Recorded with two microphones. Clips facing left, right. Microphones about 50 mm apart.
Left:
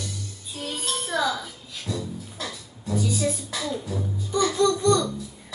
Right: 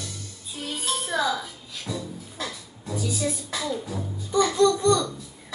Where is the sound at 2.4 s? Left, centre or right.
Centre.